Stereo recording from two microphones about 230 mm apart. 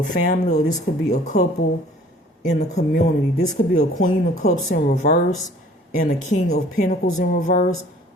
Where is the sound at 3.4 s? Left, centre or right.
Left.